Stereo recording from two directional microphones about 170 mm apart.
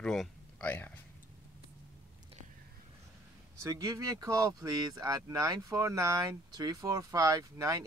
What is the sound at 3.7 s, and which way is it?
Speech, 20° right (ahead or behind).